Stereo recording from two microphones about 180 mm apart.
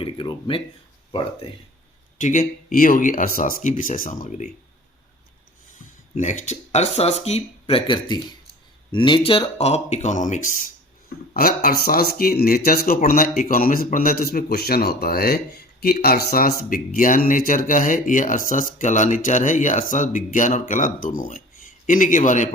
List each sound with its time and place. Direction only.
0.0 s a sound: 25° left (ahead or behind)
2.2 s speech: 45° left (ahead or behind)
6.1 s speech: 45° left (ahead or behind)
11.3 s speech: 55° left (ahead or behind)